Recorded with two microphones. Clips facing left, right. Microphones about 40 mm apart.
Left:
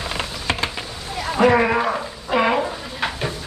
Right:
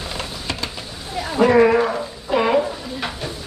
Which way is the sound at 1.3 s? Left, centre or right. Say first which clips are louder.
Right 2 dB; centre.